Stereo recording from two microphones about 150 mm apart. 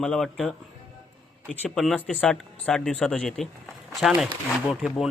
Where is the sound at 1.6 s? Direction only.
Centre (ahead or behind).